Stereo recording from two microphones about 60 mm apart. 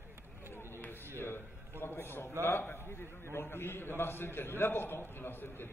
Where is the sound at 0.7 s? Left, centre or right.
Left.